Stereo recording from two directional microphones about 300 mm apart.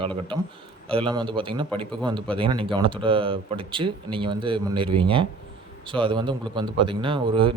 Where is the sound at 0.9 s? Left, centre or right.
Centre.